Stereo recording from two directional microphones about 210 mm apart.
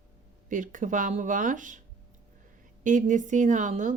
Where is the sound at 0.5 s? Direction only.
40° right (ahead or behind).